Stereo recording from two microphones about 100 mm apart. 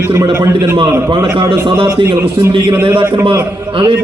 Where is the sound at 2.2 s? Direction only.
30° right (ahead or behind).